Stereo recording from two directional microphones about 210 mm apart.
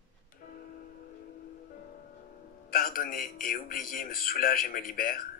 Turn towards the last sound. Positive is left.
turn(degrees=40)  # may be behind; listen again after turning